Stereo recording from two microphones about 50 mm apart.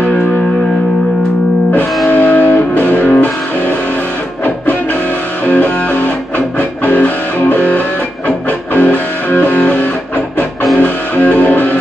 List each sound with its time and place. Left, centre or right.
2.0 s music: left
5.5 s music: left